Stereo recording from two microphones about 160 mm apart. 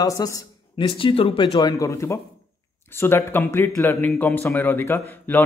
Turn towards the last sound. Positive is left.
turn(degrees=10)  # may be behind; listen again after turning